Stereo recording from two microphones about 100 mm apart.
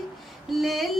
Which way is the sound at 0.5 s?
Centre (ahead or behind).